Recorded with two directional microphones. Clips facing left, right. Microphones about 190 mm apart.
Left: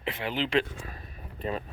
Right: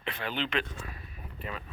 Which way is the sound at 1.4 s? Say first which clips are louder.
Left 8 dB; 35° left (ahead or behind).